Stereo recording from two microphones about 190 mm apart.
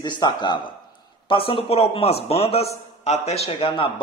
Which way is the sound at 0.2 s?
25° left (ahead or behind).